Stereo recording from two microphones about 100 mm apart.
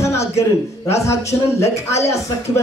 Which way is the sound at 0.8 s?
30° left (ahead or behind).